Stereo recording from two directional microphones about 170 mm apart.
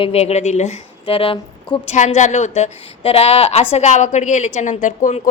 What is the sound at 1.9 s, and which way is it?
A woman's voice, 45° left (ahead or behind).